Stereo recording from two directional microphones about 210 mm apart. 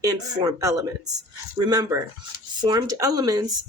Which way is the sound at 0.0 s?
20° right (ahead or behind).